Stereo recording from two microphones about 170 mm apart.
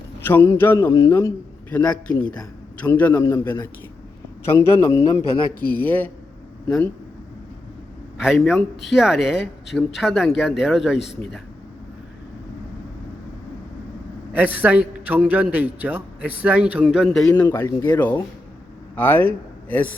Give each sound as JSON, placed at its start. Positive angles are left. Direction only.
{"t": 0.2, "sound": "a man's voice", "side_deg": 15}
{"t": 1.7, "sound": "a man's voice", "side_deg": 5}
{"t": 8.2, "sound": "speech", "side_deg": 0}
{"t": 14.3, "sound": "a man's voice", "side_deg": -10}
{"t": 17.3, "sound": "a man's voice", "side_deg": 20}